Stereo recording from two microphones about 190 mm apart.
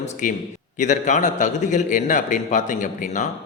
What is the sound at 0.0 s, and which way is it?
A man's voice, 40° left (ahead or behind).